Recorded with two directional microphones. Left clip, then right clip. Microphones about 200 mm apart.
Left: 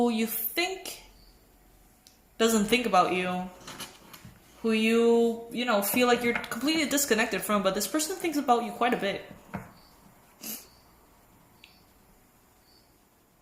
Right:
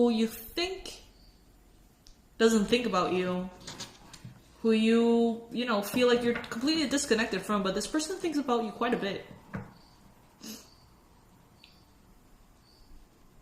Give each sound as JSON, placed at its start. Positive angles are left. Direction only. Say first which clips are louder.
{"t": 0.0, "sound": "speech", "louder": "right 1 dB", "side_deg": 30}
{"t": 2.4, "sound": "speech", "louder": "even", "side_deg": 30}
{"t": 4.6, "sound": "speech", "louder": "left 2 dB", "side_deg": 25}